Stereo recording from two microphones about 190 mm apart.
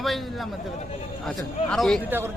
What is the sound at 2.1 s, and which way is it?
Speech, 10° right (ahead or behind).